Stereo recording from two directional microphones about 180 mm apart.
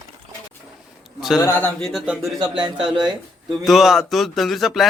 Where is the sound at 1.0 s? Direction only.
Centre (ahead or behind).